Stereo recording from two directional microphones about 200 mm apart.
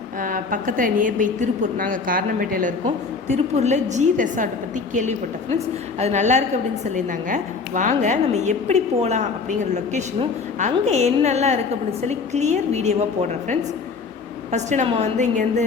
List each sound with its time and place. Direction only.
0.2 s a woman's voice: 40° right (ahead or behind)